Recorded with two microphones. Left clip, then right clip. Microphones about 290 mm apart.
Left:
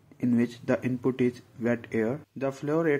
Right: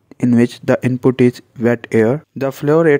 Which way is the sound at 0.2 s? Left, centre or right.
Right.